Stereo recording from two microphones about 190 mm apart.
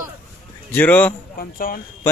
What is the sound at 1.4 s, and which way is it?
Speech, 50° left (ahead or behind).